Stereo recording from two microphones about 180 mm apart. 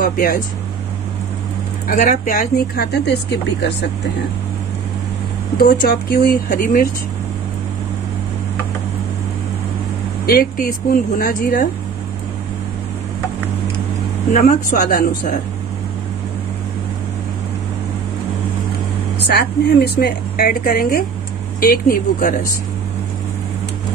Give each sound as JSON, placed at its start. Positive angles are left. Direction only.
{"t": 0.0, "sound": "speech", "side_deg": 55}
{"t": 1.9, "sound": "speech", "side_deg": 45}
{"t": 5.6, "sound": "speech", "side_deg": 55}
{"t": 10.2, "sound": "speech", "side_deg": 55}
{"t": 14.3, "sound": "speech", "side_deg": 45}
{"t": 19.2, "sound": "speech", "side_deg": 60}